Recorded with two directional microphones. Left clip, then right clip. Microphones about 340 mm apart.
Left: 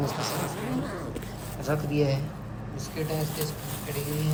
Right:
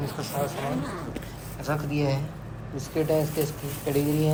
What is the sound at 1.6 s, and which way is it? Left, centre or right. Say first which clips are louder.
Speech: left 1 dB; centre.